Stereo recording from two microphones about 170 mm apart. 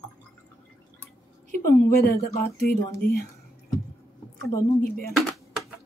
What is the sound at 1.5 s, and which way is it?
Speech, 60° left (ahead or behind).